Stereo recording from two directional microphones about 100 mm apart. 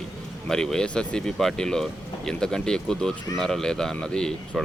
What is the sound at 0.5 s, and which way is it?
Speech, 5° left (ahead or behind).